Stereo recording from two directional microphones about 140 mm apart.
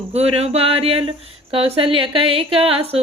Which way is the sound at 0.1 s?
45° right (ahead or behind).